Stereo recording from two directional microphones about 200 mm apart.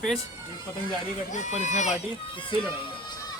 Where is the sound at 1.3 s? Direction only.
35° left (ahead or behind).